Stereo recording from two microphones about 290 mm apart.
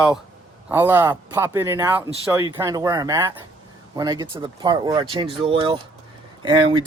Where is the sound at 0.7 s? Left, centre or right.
Centre.